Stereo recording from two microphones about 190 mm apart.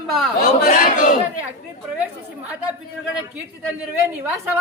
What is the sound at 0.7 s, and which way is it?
Speech, 45° left (ahead or behind).